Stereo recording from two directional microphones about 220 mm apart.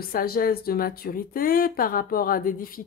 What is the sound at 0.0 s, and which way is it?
Speech, 40° left (ahead or behind).